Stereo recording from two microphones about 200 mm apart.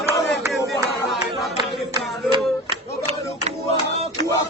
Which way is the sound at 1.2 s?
20° right (ahead or behind).